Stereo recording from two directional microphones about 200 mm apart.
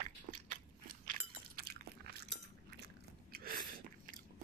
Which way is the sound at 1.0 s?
50° right (ahead or behind).